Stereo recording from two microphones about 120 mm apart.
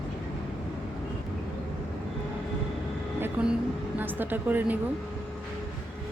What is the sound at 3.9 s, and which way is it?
Speech, 15° right (ahead or behind).